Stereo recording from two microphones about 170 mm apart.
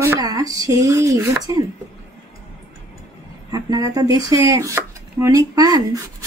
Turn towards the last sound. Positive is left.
turn(degrees=-20)  # may be behind; listen again after turning